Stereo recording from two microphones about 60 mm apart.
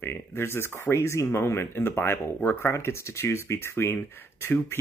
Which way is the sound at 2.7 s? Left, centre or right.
Left.